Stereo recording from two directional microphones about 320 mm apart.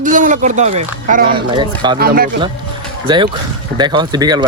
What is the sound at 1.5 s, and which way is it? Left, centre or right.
Speech, centre.